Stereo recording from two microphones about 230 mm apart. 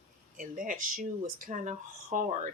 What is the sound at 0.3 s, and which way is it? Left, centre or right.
Speech, right.